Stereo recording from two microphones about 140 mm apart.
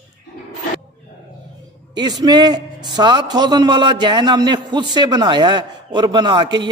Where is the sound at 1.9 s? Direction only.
30° right (ahead or behind).